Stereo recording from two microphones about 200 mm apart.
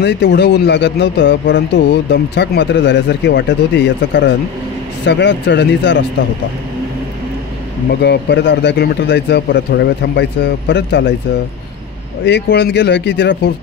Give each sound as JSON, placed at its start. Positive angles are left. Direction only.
{"t": 0.0, "sound": "speech", "side_deg": 60}
{"t": 8.0, "sound": "speech", "side_deg": 55}
{"t": 12.3, "sound": "speech", "side_deg": 60}